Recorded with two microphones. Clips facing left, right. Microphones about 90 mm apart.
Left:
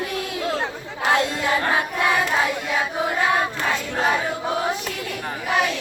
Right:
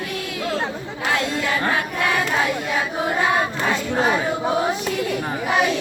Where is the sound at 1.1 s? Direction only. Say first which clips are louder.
Left 2 dB; 20° left (ahead or behind).